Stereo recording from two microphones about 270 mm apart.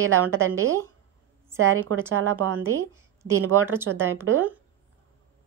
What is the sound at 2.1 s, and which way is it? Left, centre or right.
Speech, right.